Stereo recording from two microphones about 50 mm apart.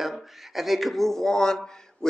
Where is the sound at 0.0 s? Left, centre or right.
Centre.